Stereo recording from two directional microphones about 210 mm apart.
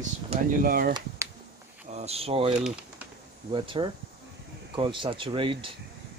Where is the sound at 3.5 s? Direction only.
25° right (ahead or behind).